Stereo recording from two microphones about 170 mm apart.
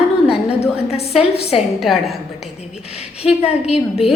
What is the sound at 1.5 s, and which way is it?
Speech, centre (ahead or behind).